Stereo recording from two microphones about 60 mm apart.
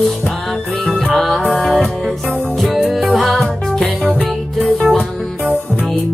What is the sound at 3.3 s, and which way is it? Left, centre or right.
Music, centre.